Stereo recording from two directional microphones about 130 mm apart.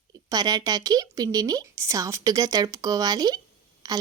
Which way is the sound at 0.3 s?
30° right (ahead or behind).